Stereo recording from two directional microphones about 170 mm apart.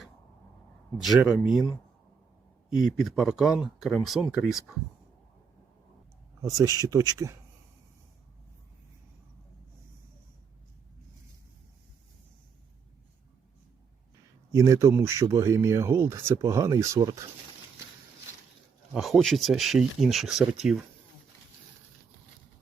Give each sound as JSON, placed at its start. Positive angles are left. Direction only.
{"t": 0.9, "sound": "speech", "side_deg": 0}
{"t": 2.6, "sound": "speech", "side_deg": 0}
{"t": 6.4, "sound": "speech", "side_deg": -20}
{"t": 14.5, "sound": "speech", "side_deg": -20}
{"t": 18.9, "sound": "speech", "side_deg": 0}